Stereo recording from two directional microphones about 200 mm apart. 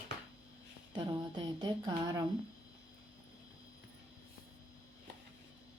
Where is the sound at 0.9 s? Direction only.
20° right (ahead or behind).